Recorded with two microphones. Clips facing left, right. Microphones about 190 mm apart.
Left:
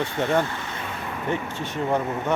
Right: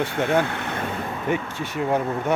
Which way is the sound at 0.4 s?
65° right (ahead or behind).